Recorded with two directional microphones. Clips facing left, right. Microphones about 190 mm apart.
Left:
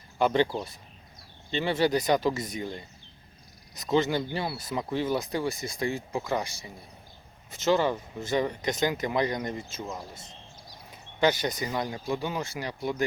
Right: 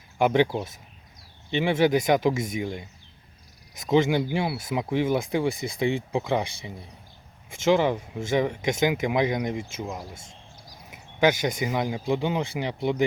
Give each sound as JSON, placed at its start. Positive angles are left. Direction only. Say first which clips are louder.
{"t": 0.2, "sound": "speech", "louder": "right 3 dB", "side_deg": -15}
{"t": 3.8, "sound": "speech", "louder": "right 4 dB", "side_deg": -10}